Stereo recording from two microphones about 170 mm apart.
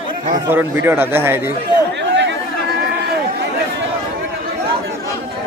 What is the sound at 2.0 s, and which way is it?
Chatter, 90° right.